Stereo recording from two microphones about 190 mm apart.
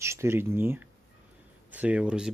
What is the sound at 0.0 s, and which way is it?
Speech, 15° right (ahead or behind).